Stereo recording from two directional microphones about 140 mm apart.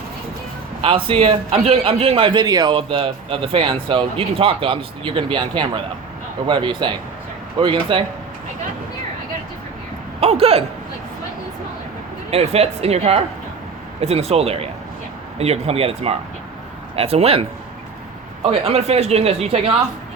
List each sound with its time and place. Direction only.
0.8 s a man's voice: 40° right (ahead or behind)
10.2 s speech: 45° right (ahead or behind)
12.3 s speech: 50° right (ahead or behind)
18.6 s speech: 45° right (ahead or behind)